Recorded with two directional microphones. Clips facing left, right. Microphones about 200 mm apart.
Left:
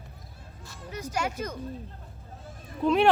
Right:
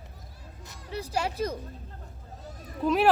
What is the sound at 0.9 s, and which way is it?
Speech, 35° right (ahead or behind).